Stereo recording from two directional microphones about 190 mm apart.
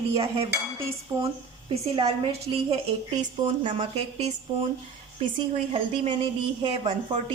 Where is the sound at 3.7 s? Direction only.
35° right (ahead or behind).